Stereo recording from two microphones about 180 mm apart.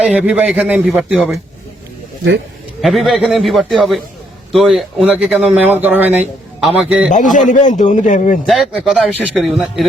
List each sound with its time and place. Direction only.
0.0 s a man's voice: 5° right (ahead or behind)
2.8 s a man's voice: centre (ahead or behind)
7.5 s a man's voice: 40° left (ahead or behind)
8.4 s a man's voice: centre (ahead or behind)